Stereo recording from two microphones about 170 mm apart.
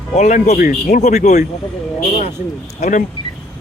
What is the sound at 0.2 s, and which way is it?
Speech, 40° left (ahead or behind).